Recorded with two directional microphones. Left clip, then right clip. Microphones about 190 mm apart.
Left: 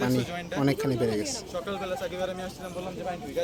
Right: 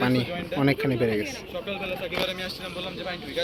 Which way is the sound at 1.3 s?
35° left (ahead or behind).